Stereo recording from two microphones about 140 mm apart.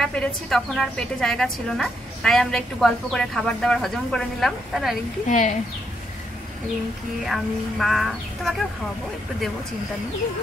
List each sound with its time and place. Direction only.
0.0 s a woman's voice: 5° left (ahead or behind)
5.3 s speech: 65° left (ahead or behind)
7.2 s a woman's voice: centre (ahead or behind)